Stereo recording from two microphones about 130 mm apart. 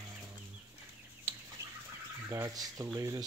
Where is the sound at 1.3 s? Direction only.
20° right (ahead or behind).